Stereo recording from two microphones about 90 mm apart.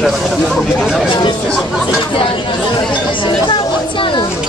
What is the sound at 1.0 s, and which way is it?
Speech, 65° left (ahead or behind).